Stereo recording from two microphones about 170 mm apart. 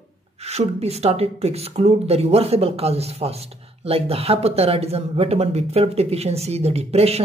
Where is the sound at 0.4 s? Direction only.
40° right (ahead or behind).